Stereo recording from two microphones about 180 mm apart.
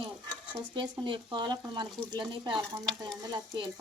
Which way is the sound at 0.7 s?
25° right (ahead or behind).